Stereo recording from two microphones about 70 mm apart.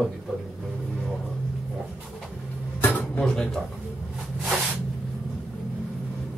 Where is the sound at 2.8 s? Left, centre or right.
Left.